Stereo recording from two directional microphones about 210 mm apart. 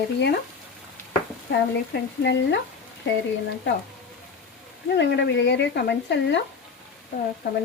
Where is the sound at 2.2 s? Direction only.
55° left (ahead or behind).